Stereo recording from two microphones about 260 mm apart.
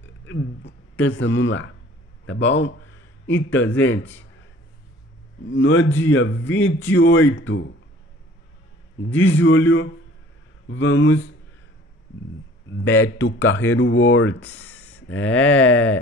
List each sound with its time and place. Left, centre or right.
0.2 s a man's voice: left
5.5 s speech: left
9.1 s speech: left
12.9 s speech: left
14.4 s a sound: centre
15.0 s speech: left